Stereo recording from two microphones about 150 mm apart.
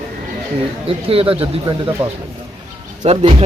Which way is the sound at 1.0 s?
40° right (ahead or behind).